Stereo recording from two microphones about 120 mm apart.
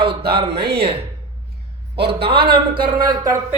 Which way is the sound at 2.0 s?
50° right (ahead or behind).